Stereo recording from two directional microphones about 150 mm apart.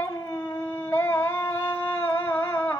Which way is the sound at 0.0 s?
15° left (ahead or behind).